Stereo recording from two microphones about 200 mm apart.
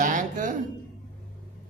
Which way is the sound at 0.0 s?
40° right (ahead or behind).